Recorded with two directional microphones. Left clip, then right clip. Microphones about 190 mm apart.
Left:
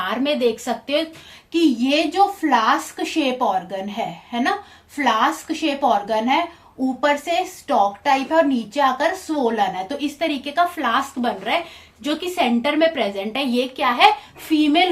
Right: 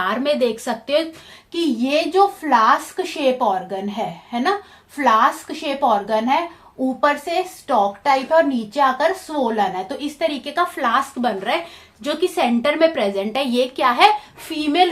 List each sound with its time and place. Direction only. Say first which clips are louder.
0.0 s a woman's voice: right 1 dB; 40° right (ahead or behind)
2.5 s a woman's voice: right 3 dB; 25° right (ahead or behind)